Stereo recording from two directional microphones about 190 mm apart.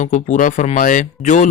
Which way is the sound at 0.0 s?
40° left (ahead or behind).